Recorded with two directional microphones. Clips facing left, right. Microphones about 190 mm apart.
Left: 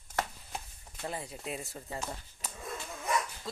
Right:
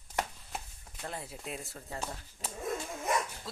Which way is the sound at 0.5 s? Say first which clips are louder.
Even; centre (ahead or behind).